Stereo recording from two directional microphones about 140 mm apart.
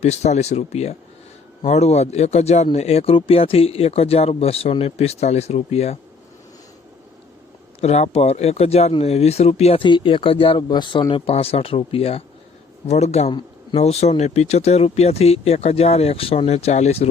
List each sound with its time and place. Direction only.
0.0 s speech: 55° left (ahead or behind)
7.8 s speech: 50° left (ahead or behind)